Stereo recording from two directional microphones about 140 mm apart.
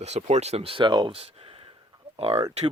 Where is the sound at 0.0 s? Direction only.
50° right (ahead or behind).